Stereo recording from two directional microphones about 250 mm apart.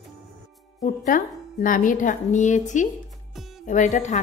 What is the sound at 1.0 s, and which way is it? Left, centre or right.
A woman's voice, left.